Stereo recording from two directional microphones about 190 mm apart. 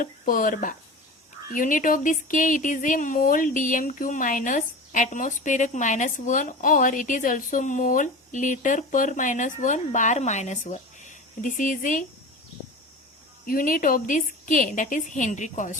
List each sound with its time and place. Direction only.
0.0 s speech: 45° left (ahead or behind)
13.4 s speech: 45° left (ahead or behind)